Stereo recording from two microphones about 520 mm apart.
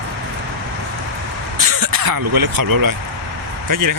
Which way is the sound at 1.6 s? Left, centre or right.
Right.